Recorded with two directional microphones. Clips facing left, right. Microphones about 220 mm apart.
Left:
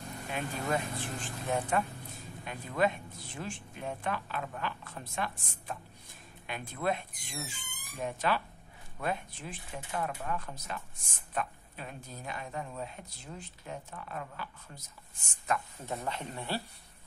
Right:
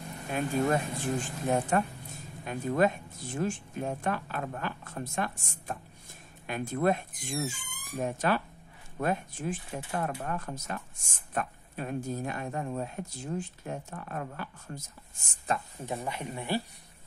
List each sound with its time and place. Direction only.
0.3 s speech: 45° right (ahead or behind)
15.8 s speech: 15° right (ahead or behind)